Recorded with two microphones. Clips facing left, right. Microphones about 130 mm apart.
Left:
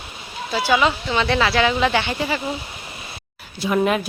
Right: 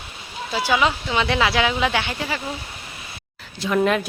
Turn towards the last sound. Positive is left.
turn(degrees=5)  # may be behind; listen again after turning